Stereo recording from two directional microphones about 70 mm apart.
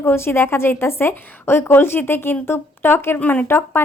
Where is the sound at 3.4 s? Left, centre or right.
Left.